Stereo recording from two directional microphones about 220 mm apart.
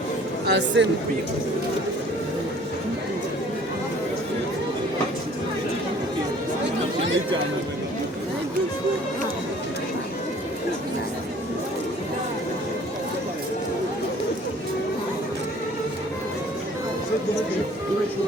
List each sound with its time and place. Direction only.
0.4 s speech: 55° right (ahead or behind)